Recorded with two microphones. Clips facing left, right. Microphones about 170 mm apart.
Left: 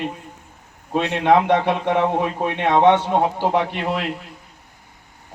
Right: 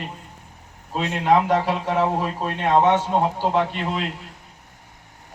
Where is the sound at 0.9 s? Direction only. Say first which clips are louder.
Left 3 dB; 70° left (ahead or behind).